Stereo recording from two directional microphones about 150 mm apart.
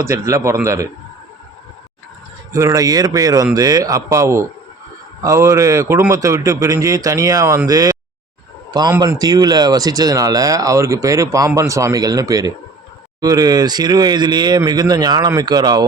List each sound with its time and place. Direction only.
0.0 s speech: 20° right (ahead or behind)
2.5 s speech: 20° right (ahead or behind)
9.0 s speech: 25° right (ahead or behind)